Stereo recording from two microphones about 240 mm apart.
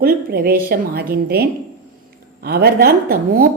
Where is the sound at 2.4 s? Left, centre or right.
Right.